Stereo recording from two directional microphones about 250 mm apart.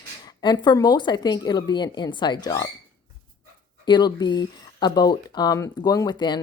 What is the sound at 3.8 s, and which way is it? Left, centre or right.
Speech, centre.